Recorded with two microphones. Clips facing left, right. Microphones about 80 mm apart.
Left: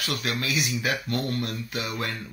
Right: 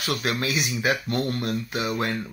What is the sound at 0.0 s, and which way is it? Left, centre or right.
Speech, right.